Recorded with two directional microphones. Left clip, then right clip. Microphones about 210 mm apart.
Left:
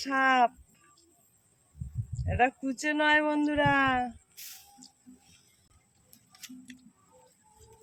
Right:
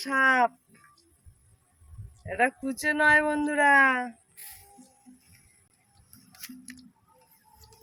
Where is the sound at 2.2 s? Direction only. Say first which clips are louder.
Right 1 dB; 15° right (ahead or behind).